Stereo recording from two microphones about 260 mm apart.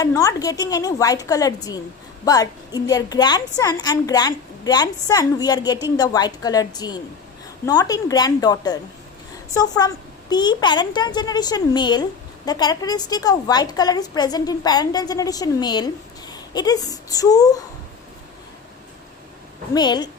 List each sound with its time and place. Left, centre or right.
0.0 s a woman's voice: centre
19.7 s a woman's voice: centre